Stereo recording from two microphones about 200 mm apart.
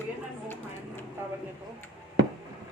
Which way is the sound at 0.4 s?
10° left (ahead or behind).